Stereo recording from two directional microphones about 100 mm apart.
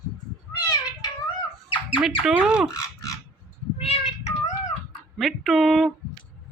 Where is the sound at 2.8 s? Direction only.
30° left (ahead or behind).